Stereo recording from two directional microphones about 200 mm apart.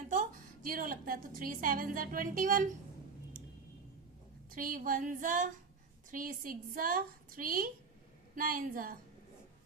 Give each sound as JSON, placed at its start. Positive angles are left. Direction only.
{"t": 0.1, "sound": "a woman's voice", "side_deg": -40}
{"t": 4.5, "sound": "a woman's voice", "side_deg": -40}